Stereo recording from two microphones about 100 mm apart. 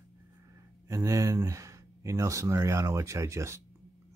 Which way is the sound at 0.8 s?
30° right (ahead or behind).